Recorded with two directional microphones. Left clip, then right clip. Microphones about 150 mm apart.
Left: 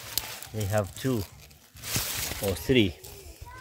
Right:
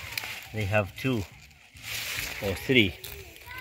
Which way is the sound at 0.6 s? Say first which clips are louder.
Right 2 dB; 5° right (ahead or behind).